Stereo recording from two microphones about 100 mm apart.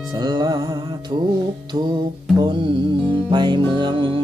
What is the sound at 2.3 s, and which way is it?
Music, 50° right (ahead or behind).